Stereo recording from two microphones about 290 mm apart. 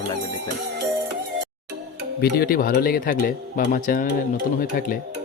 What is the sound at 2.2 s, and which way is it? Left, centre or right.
Speech, left.